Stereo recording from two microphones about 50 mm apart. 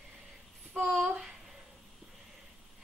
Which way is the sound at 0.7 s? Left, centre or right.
Centre.